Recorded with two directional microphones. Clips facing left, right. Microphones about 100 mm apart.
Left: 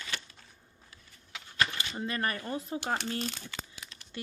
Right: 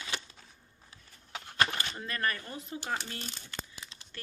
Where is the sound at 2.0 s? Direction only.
25° left (ahead or behind).